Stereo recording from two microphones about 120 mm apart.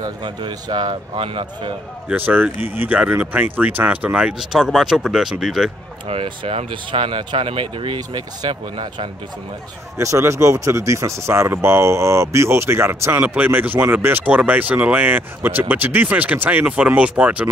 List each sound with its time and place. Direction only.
0.0 s speech: 40° right (ahead or behind)
2.0 s speech: 15° right (ahead or behind)
6.0 s speech: 50° right (ahead or behind)
9.9 s speech: 25° right (ahead or behind)